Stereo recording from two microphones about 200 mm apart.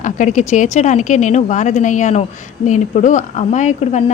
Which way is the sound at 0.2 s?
40° left (ahead or behind).